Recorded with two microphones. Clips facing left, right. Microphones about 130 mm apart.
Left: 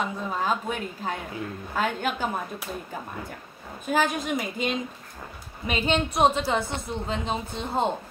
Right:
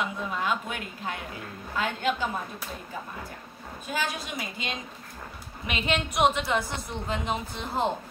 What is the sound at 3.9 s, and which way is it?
Speech, 50° left (ahead or behind).